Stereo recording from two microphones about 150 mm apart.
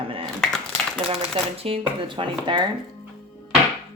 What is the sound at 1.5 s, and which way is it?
Speech, 40° right (ahead or behind).